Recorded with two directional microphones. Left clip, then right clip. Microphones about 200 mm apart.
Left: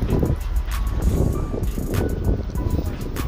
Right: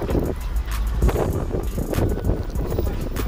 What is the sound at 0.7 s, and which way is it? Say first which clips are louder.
Vehicle: right 3 dB; centre (ahead or behind).